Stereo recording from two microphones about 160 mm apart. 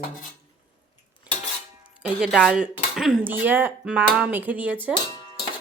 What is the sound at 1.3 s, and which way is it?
Dishes, 10° right (ahead or behind).